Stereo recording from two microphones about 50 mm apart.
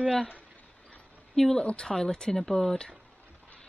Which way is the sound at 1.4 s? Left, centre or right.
Centre.